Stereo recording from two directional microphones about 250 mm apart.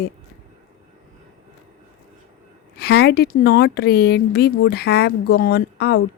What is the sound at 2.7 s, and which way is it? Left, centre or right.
A woman's voice, left.